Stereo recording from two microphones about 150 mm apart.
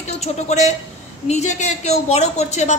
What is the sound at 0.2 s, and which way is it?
A woman's voice, 50° left (ahead or behind).